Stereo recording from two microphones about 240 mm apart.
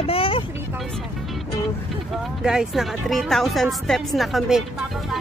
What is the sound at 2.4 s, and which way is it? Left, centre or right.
Speech, centre.